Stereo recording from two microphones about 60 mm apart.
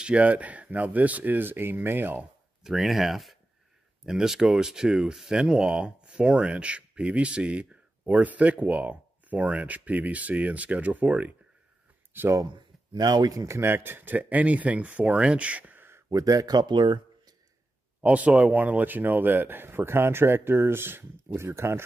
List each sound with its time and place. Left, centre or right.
0.0 s speech: right
2.6 s speech: centre; by 11.3 s right
13.2 s speech: right
13.5 s speech: right
16.1 s speech: right
18.0 s speech: right